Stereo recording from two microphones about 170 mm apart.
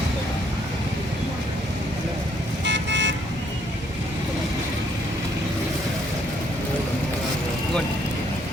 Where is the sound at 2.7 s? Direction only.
90° right.